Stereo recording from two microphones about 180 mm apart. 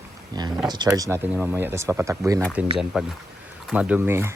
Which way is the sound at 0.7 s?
20° right (ahead or behind).